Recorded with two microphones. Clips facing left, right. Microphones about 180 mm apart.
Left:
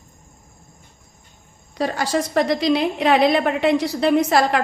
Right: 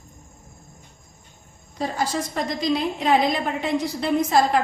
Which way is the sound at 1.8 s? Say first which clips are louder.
Left 4 dB; 75° left (ahead or behind).